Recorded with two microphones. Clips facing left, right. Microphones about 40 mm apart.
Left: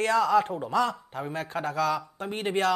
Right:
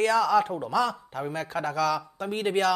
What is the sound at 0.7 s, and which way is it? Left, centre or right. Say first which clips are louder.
A man's voice: even; centre.